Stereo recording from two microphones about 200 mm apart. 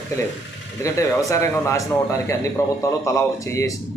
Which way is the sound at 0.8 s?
15° left (ahead or behind).